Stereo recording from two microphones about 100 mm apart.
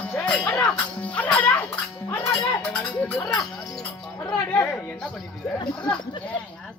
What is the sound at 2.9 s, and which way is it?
Speech, 15° left (ahead or behind).